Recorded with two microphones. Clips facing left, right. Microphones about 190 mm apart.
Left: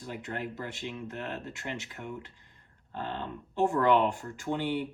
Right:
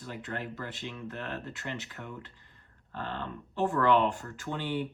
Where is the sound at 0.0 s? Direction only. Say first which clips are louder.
Left 1 dB; 15° left (ahead or behind).